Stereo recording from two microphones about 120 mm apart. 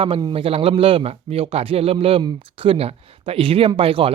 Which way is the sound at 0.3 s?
55° right (ahead or behind).